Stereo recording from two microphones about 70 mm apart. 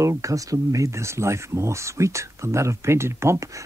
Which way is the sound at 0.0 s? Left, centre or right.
Right.